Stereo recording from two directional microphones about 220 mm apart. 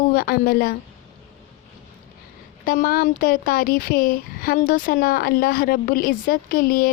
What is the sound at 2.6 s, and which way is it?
Speech, 40° left (ahead or behind).